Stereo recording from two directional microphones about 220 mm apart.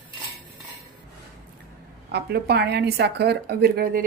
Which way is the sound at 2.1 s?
45° right (ahead or behind).